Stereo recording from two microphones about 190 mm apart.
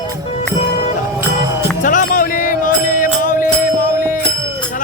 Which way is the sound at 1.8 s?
45° left (ahead or behind).